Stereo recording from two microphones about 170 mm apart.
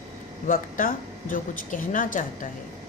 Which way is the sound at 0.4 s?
55° left (ahead or behind).